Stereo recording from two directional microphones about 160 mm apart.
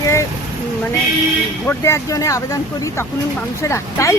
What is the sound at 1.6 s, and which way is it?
Speech, 15° left (ahead or behind).